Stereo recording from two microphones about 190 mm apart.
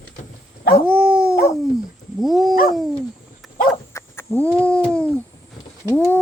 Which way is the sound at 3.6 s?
15° left (ahead or behind).